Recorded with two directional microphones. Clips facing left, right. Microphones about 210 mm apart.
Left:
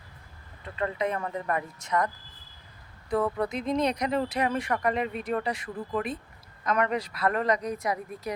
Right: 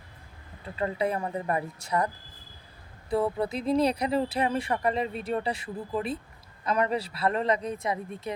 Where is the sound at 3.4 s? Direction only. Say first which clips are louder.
Right 2 dB; 30° right (ahead or behind).